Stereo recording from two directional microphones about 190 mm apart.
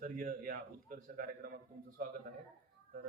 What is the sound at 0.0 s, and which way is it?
Speech, 50° right (ahead or behind).